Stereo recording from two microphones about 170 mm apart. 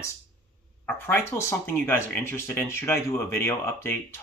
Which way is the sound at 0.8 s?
10° left (ahead or behind).